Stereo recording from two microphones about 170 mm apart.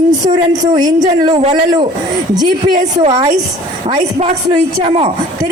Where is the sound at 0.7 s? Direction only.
20° right (ahead or behind).